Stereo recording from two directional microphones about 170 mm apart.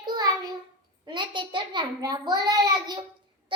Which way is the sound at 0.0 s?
25° right (ahead or behind).